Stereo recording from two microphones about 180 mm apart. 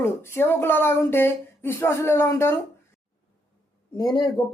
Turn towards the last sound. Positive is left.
turn(degrees=25)  # may be behind; listen again after turning